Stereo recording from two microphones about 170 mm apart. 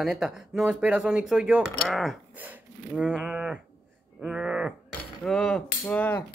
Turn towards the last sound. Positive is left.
turn(degrees=10)  # may be behind; listen again after turning